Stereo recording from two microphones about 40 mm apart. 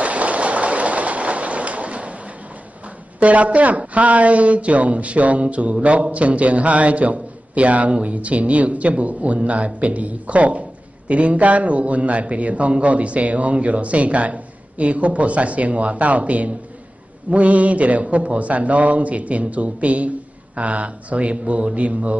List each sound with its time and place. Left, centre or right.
0.0 s train: right
3.2 s a man's voice: right